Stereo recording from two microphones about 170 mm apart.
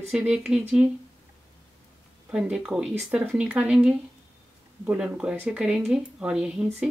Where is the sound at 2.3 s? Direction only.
5° right (ahead or behind).